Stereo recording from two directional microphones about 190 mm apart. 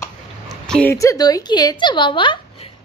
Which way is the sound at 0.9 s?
15° left (ahead or behind).